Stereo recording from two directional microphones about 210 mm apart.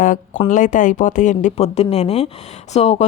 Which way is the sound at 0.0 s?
40° left (ahead or behind).